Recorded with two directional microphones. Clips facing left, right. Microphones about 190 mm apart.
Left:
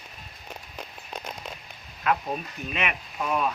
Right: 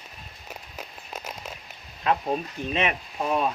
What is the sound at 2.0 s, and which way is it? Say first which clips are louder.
Speech: right 2 dB; 30° right (ahead or behind).